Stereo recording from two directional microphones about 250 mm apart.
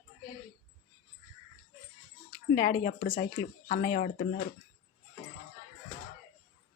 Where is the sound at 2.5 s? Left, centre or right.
Left.